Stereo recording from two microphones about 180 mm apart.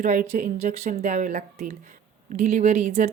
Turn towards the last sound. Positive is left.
turn(degrees=-35)  # may be behind; listen again after turning